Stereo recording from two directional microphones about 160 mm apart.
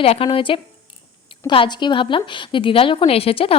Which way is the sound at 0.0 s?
35° left (ahead or behind).